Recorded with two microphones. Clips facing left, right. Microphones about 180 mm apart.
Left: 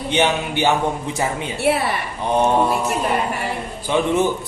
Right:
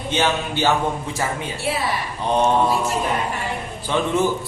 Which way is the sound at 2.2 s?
15° left (ahead or behind).